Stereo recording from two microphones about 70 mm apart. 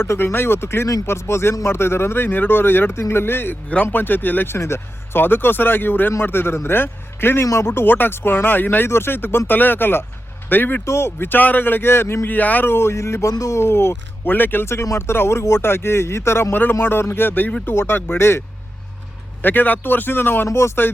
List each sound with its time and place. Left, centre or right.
0.0 s speech: left
7.4 s speech: left
7.7 s a man's voice: left
20.5 s speech: left